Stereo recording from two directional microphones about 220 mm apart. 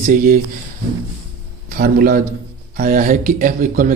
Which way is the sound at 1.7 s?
40° right (ahead or behind).